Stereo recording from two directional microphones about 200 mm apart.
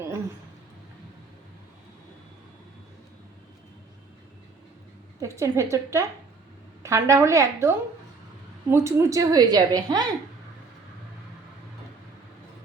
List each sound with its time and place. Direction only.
5.2 s a woman's voice: 15° right (ahead or behind)